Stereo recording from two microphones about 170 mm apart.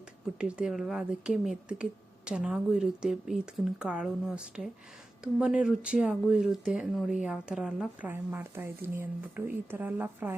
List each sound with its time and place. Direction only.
0.3 s speech: 5° right (ahead or behind)